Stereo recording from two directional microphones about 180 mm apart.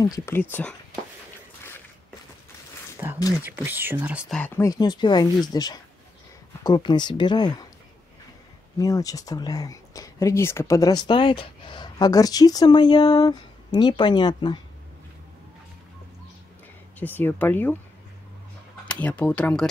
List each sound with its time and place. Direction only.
0.0 s speech: 15° left (ahead or behind)
3.2 s speech: 20° left (ahead or behind)
3.4 s speech: 10° right (ahead or behind)
4.4 s speech: 15° left (ahead or behind)
8.7 s speech: 20° left (ahead or behind)
17.0 s speech: 10° left (ahead or behind)
18.9 s speech: 10° left (ahead or behind)